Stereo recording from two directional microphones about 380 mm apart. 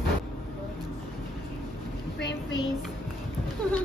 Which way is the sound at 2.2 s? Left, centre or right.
Left.